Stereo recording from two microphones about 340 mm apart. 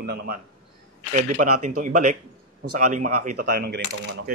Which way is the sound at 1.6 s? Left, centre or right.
Right.